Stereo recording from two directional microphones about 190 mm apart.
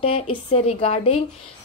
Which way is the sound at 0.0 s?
30° left (ahead or behind).